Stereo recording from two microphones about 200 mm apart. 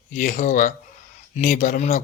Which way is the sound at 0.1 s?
40° left (ahead or behind).